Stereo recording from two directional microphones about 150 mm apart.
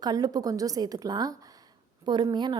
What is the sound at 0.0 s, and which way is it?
A woman's voice, 25° right (ahead or behind).